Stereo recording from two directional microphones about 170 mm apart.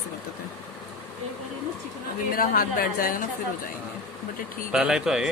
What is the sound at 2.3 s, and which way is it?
Speech, 60° left (ahead or behind).